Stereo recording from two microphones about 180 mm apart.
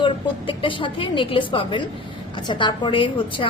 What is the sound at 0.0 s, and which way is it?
A woman's voice, 30° left (ahead or behind).